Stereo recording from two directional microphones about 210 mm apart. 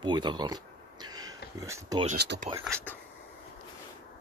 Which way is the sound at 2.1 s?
55° right (ahead or behind).